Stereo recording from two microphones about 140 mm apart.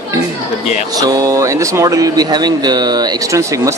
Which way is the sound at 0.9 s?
25° right (ahead or behind).